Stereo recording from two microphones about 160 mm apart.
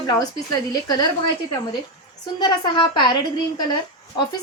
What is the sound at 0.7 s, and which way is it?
Speech, 25° left (ahead or behind).